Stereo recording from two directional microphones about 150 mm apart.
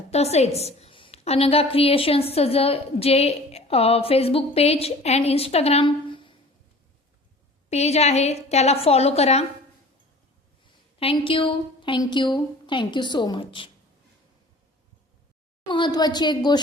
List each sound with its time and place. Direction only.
0.1 s a woman's voice: 45° left (ahead or behind)
7.7 s a woman's voice: 45° left (ahead or behind)
11.0 s a woman's voice: 35° left (ahead or behind)
15.7 s a woman's voice: 30° left (ahead or behind)